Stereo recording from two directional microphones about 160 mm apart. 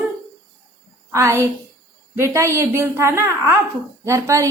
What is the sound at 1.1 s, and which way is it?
A woman's voice, 15° right (ahead or behind).